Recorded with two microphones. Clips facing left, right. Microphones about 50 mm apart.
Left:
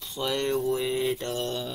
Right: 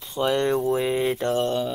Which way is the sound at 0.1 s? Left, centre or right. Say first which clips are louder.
Right 6 dB; right.